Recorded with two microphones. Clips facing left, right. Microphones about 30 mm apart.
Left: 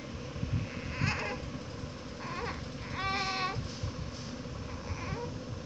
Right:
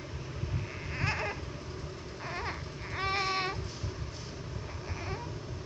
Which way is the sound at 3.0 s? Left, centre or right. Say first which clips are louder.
Right 2 dB; right.